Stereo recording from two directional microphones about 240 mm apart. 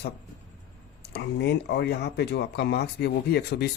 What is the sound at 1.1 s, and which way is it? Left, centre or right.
Speech, left.